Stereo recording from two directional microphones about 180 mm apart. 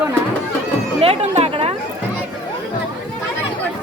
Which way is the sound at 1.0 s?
35° right (ahead or behind).